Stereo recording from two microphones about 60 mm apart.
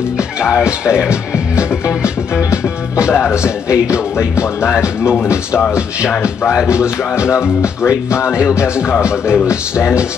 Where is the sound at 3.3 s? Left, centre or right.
Left.